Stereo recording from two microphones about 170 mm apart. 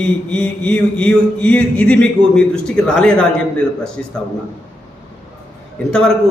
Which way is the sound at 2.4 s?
5° left (ahead or behind).